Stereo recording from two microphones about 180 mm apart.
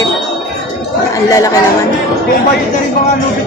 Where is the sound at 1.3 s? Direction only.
20° left (ahead or behind).